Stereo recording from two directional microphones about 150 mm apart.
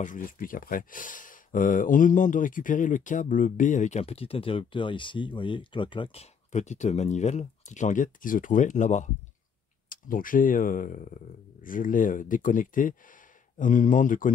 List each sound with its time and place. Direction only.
0.0 s speech: 65° left (ahead or behind); by 6.2 s 35° left (ahead or behind)
6.5 s speech: 50° left (ahead or behind)
9.8 s speech: 65° left (ahead or behind)